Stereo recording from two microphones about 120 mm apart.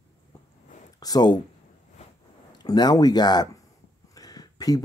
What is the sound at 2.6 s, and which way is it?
Speech, 35° left (ahead or behind).